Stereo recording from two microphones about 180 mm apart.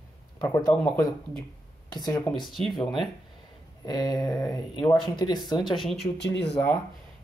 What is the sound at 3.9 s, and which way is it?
Speech, 20° left (ahead or behind).